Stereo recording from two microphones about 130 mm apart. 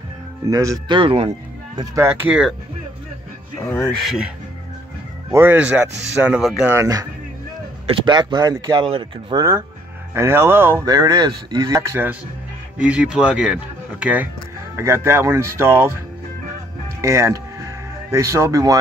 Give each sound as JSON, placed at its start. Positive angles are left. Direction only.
{"t": 0.5, "sound": "speech", "side_deg": -25}
{"t": 0.8, "sound": "speech", "side_deg": -40}
{"t": 2.0, "sound": "speech", "side_deg": -15}
{"t": 4.0, "sound": "speech", "side_deg": -5}
{"t": 5.3, "sound": "speech", "side_deg": -15}
{"t": 6.7, "sound": "speech", "side_deg": -25}
{"t": 7.8, "sound": "speech", "side_deg": -40}
{"t": 8.8, "sound": "speech", "side_deg": -40}
{"t": 9.4, "sound": "speech", "side_deg": -20}
{"t": 10.9, "sound": "speech", "side_deg": -30}
{"t": 11.9, "sound": "speech", "side_deg": -15}
{"t": 17.0, "sound": "speech", "side_deg": -25}